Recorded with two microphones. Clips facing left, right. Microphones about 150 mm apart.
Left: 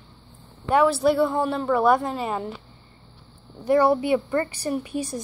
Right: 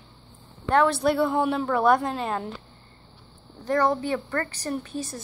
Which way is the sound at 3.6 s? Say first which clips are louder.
Left 4 dB; 10° left (ahead or behind).